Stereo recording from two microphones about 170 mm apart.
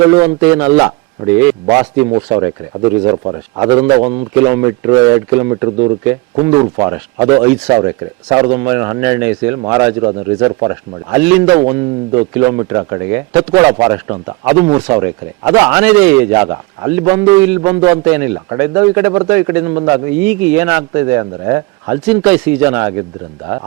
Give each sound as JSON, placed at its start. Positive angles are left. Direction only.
{"t": 0.1, "sound": "speech", "side_deg": -25}
{"t": 0.3, "sound": "speech", "side_deg": -15}
{"t": 2.0, "sound": "speech", "side_deg": -30}
{"t": 7.4, "sound": "speech", "side_deg": -10}
{"t": 7.7, "sound": "speech", "side_deg": -25}
{"t": 11.7, "sound": "speech", "side_deg": -20}
{"t": 20.2, "sound": "speech", "side_deg": -10}